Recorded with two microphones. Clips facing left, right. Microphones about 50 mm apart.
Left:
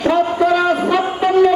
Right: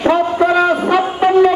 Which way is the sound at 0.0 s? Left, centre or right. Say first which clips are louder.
Right 1 dB; right.